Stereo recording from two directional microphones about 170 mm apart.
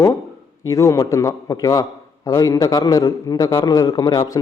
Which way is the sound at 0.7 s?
20° left (ahead or behind).